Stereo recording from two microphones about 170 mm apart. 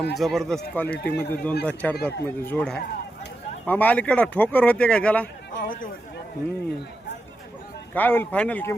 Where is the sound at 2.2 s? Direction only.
10° left (ahead or behind).